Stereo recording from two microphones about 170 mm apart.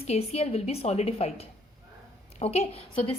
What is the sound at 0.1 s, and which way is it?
A woman's voice, 35° left (ahead or behind).